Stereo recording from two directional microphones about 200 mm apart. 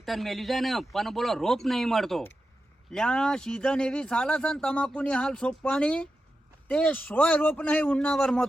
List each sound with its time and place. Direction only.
0.0 s a man's voice: centre (ahead or behind)